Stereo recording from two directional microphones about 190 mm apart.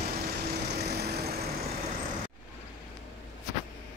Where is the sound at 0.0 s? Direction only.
55° right (ahead or behind).